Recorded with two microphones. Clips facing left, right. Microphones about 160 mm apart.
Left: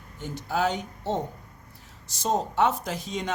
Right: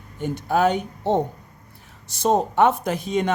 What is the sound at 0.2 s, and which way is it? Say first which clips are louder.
Speech: right 7 dB; 60° right (ahead or behind).